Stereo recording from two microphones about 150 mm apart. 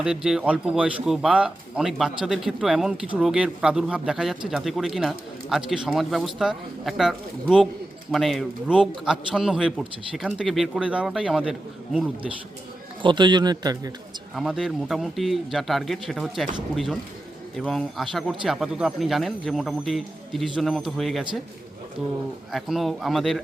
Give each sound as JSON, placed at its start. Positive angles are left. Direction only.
{"t": 0.0, "sound": "speech", "side_deg": -5}
{"t": 13.0, "sound": "a man's voice", "side_deg": -30}
{"t": 14.3, "sound": "speech", "side_deg": 0}
{"t": 22.5, "sound": "speech", "side_deg": 0}